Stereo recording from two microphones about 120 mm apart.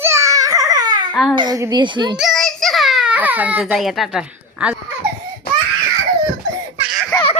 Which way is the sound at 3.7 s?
Centre (ahead or behind).